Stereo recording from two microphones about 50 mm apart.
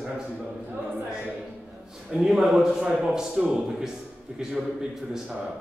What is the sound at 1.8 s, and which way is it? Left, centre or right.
A man's voice, centre.